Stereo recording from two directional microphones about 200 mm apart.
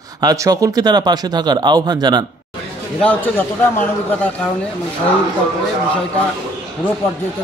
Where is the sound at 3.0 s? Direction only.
10° left (ahead or behind).